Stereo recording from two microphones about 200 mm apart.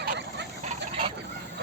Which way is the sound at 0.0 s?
55° right (ahead or behind).